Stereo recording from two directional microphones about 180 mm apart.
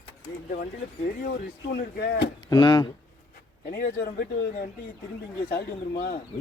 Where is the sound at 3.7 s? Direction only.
55° left (ahead or behind).